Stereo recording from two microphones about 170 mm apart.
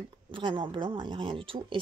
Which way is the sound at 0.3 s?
30° right (ahead or behind).